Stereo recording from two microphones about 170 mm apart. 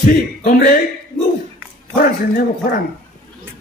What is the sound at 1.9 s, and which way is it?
Speech, 60° left (ahead or behind).